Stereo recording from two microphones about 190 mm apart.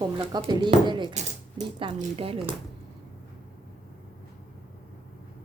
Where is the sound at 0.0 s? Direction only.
25° right (ahead or behind).